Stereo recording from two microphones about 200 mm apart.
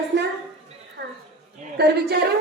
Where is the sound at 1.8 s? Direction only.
55° right (ahead or behind).